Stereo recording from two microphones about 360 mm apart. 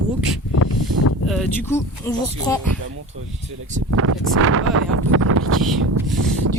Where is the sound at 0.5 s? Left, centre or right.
Left.